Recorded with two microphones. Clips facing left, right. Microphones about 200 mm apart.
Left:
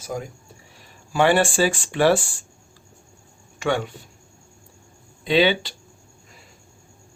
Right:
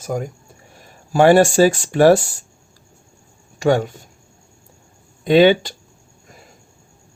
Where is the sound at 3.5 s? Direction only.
40° right (ahead or behind).